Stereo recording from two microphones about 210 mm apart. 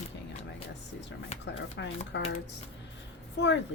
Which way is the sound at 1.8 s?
60° left (ahead or behind).